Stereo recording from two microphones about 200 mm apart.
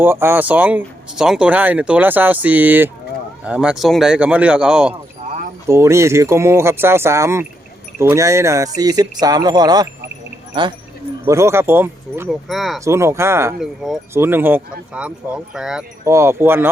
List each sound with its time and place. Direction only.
0.0 s speech: 10° right (ahead or behind)
5.6 s speech: 15° right (ahead or behind)
11.3 s speech: 15° right (ahead or behind)
12.3 s speech: centre (ahead or behind)
12.8 s speech: 15° right (ahead or behind)
13.6 s speech: centre (ahead or behind)
16.0 s speech: 15° right (ahead or behind)